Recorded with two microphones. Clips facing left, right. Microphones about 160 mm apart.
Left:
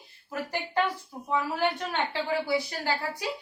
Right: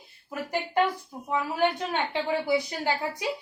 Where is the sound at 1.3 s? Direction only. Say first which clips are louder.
Right 2 dB; 15° right (ahead or behind).